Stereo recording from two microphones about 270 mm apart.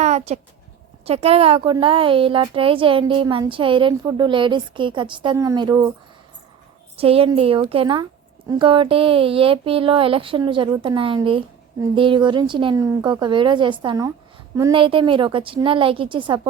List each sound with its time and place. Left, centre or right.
0.0 s a sound: right
1.0 s a woman's voice: right
6.9 s a woman's voice: right